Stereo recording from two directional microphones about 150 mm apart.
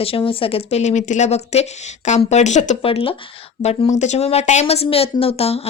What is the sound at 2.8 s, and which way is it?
Speech, 35° left (ahead or behind).